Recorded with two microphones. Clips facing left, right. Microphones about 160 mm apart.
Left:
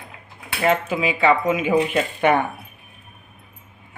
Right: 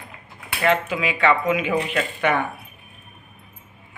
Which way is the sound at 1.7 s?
30° left (ahead or behind).